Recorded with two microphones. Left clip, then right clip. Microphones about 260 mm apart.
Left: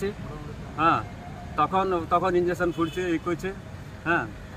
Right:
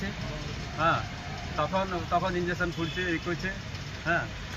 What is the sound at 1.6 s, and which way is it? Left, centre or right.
Speech, centre.